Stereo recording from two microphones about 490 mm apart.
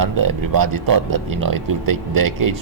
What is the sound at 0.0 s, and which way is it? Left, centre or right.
Speech, right.